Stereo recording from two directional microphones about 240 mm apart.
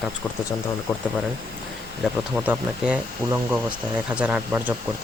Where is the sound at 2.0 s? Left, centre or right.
Centre.